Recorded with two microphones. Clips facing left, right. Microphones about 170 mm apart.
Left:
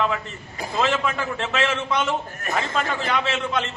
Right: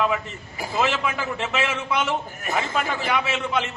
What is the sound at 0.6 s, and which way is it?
A man's voice, 5° right (ahead or behind).